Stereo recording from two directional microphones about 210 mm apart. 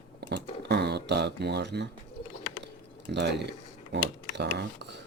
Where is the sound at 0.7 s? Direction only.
55° right (ahead or behind).